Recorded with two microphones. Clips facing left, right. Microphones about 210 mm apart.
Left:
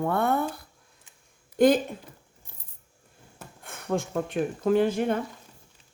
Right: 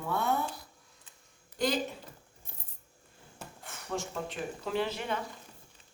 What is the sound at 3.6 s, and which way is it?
Speech, 55° left (ahead or behind).